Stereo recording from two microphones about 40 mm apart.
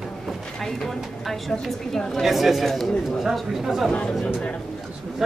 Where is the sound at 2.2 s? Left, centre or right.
Centre.